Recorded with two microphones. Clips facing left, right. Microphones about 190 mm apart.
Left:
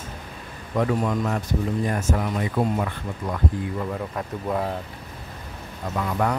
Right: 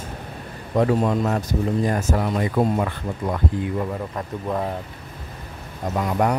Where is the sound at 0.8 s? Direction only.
35° right (ahead or behind).